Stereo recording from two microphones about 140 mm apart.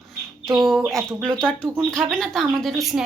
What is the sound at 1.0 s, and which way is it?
Speech, 25° right (ahead or behind).